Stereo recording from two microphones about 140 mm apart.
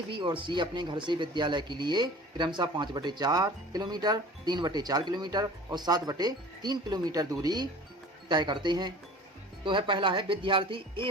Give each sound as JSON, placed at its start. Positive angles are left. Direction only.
{"t": 0.1, "sound": "speech", "side_deg": -35}